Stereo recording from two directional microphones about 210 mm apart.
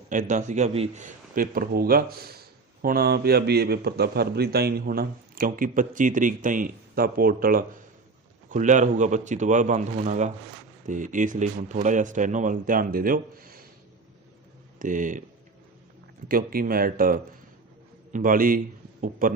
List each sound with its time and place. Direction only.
0.1 s speech: 35° right (ahead or behind)
1.4 s a man's voice: 45° right (ahead or behind)
14.8 s speech: 40° right (ahead or behind)
16.3 s a man's voice: 45° right (ahead or behind)